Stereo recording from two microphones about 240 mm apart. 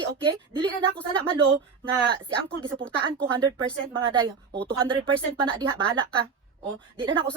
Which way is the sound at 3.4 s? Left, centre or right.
Centre.